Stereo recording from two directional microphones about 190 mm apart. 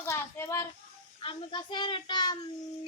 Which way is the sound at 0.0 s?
15° left (ahead or behind).